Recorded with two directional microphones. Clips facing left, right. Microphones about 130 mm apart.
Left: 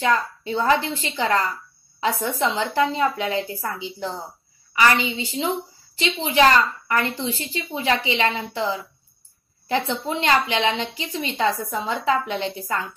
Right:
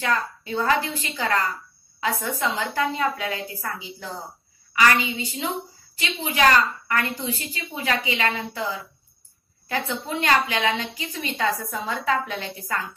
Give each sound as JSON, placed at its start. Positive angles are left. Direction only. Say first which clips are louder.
{"t": 0.0, "sound": "a woman's voice", "louder": "left 4 dB", "side_deg": 25}